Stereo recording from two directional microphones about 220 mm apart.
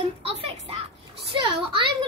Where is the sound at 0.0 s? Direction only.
25° right (ahead or behind).